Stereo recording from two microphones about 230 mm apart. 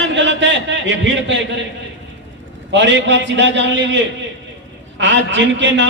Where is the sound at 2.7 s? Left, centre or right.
Right.